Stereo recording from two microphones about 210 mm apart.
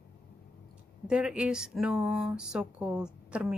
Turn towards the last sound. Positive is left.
turn(degrees=-5)  # may be behind; listen again after turning